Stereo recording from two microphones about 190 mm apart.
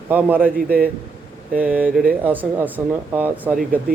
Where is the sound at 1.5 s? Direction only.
10° right (ahead or behind).